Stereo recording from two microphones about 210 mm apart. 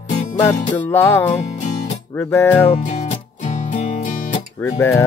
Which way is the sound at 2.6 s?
30° left (ahead or behind).